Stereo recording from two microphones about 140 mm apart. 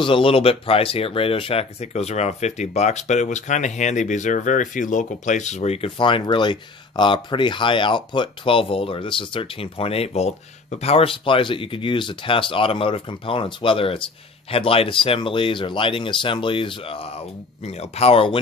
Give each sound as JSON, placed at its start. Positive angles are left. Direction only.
{"t": 0.0, "sound": "speech", "side_deg": 40}